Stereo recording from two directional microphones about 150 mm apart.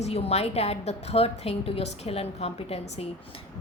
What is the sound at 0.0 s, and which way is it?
A woman's voice, 45° left (ahead or behind).